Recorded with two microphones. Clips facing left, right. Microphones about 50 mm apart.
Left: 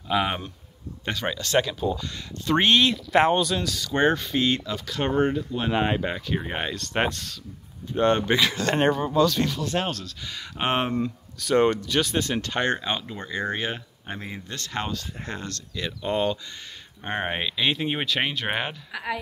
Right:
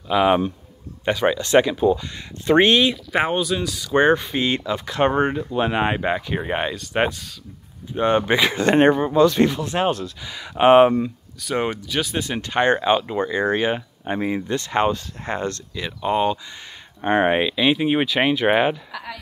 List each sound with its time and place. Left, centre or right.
0.1 s speech: centre
1.0 s speech: centre
2.6 s speech: centre; by 15.6 s right
15.7 s speech: centre
18.9 s speech: centre